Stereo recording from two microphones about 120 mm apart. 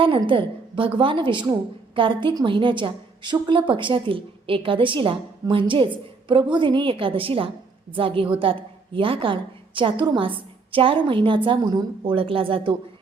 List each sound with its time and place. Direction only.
0.3 s a woman's voice: 45° right (ahead or behind)
12.1 s a woman's voice: 50° right (ahead or behind)